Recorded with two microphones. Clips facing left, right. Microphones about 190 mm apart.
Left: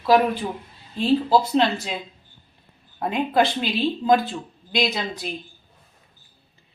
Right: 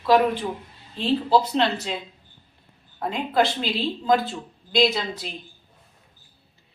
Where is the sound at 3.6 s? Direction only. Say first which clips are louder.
Left 3 dB; 20° left (ahead or behind).